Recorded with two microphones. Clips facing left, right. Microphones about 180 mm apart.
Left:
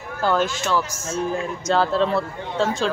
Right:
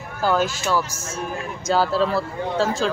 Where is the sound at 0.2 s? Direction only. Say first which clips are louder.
Even; 5° right (ahead or behind).